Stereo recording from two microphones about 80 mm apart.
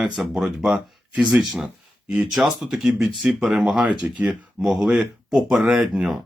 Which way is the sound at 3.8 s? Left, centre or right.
Centre.